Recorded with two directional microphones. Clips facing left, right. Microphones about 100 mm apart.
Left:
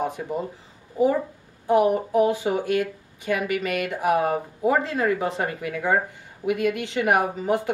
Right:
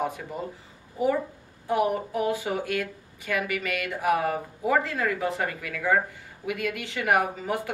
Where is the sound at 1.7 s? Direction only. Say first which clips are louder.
Left 6 dB; 25° left (ahead or behind).